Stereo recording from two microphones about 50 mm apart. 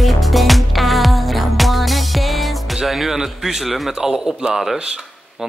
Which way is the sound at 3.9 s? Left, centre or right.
Centre.